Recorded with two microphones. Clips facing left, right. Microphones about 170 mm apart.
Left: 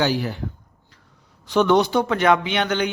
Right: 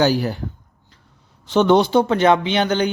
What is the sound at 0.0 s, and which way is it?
Speech, 40° right (ahead or behind).